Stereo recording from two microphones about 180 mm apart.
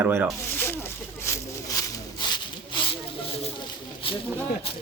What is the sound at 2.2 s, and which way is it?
Rub, 25° left (ahead or behind).